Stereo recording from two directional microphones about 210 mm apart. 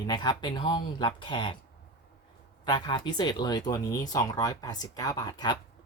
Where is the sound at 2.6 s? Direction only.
20° left (ahead or behind).